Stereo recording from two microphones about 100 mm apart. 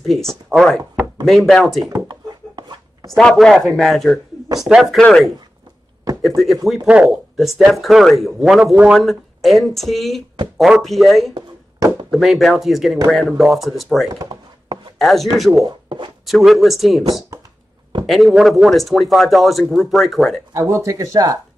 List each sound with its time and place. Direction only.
0.0 s speech: centre (ahead or behind)
2.0 s a sound: 45° right (ahead or behind)
3.2 s speech: 5° left (ahead or behind)
6.2 s speech: centre (ahead or behind)
11.3 s a sound: 45° right (ahead or behind)
12.1 s speech: centre (ahead or behind)
15.6 s speech: 50° right (ahead or behind)
16.3 s speech: centre (ahead or behind)
18.0 s speech: centre (ahead or behind)
20.5 s speech: 30° right (ahead or behind)